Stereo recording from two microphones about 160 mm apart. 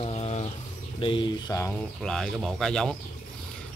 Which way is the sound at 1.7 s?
5° left (ahead or behind).